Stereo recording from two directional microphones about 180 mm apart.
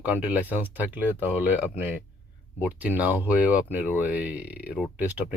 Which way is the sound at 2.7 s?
10° right (ahead or behind).